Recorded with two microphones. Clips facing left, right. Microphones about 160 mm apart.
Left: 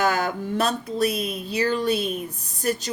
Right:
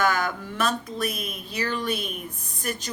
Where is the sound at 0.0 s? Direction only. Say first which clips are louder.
Left 2 dB; 30° left (ahead or behind).